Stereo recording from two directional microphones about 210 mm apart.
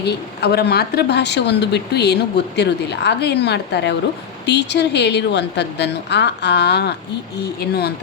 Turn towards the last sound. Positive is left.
turn(degrees=50)  # may be behind; listen again after turning